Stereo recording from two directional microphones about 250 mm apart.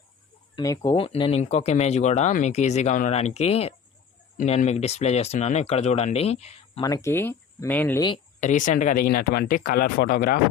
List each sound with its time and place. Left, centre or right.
0.5 s speech: centre
8.4 s speech: left